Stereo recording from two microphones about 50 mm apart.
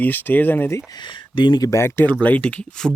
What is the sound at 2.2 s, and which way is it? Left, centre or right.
Speech, left.